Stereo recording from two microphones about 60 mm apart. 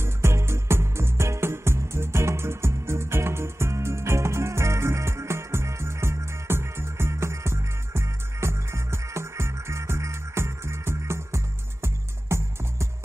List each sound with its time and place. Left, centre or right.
0.0 s music: right